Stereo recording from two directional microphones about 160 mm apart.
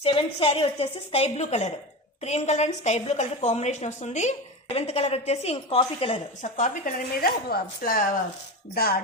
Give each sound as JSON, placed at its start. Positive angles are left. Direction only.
{"t": 0.0, "sound": "a woman's voice", "side_deg": 35}
{"t": 6.4, "sound": "speech", "side_deg": 55}
{"t": 8.7, "sound": "speech", "side_deg": 75}